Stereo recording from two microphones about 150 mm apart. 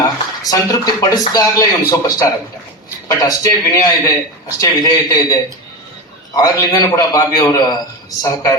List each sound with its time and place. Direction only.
0.0 s a man's voice: 25° left (ahead or behind)